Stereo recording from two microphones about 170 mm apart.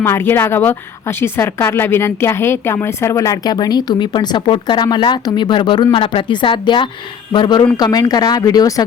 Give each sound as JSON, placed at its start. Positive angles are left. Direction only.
{"t": 0.0, "sound": "speech", "side_deg": 15}